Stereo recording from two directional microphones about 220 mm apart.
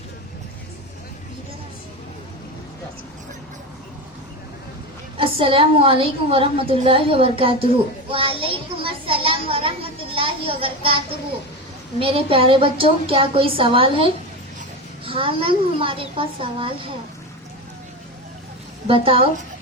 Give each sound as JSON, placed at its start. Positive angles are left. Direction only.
{"t": 5.1, "sound": "a woman's voice", "side_deg": -25}
{"t": 18.9, "sound": "a woman's voice", "side_deg": -25}